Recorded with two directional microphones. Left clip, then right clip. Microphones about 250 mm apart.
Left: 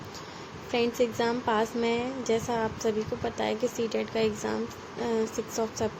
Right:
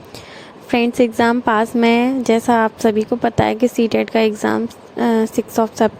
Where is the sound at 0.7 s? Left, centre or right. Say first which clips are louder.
Right 11 dB; right.